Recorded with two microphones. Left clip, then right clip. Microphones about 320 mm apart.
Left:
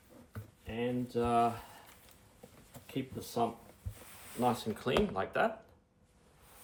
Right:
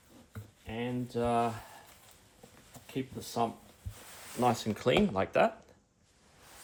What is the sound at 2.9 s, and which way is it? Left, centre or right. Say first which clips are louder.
Speech: right 2 dB; right.